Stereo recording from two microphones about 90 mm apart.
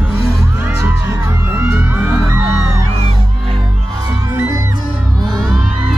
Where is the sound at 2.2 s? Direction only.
25° right (ahead or behind).